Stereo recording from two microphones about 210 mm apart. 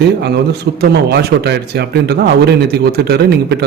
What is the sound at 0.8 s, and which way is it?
Speech, 50° right (ahead or behind).